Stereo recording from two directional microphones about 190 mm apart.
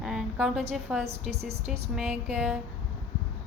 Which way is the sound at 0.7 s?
5° right (ahead or behind).